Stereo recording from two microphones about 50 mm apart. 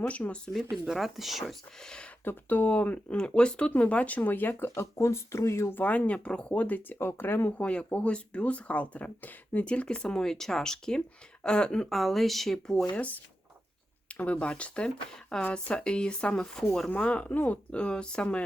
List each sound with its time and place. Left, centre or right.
0.1 s speech: left
0.5 s speech: centre
1.8 s speech: centre
2.2 s speech: left
4.7 s speech: left
5.9 s speech: left
6.5 s speech: left
7.0 s speech: left
7.6 s speech: left
11.9 s speech: centre
14.1 s speech: left
17.7 s speech: centre